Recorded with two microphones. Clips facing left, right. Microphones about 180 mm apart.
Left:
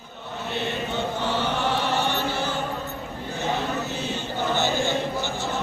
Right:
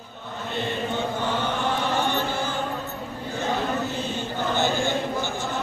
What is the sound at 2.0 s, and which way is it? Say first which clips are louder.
Chant: even; 50° right (ahead or behind).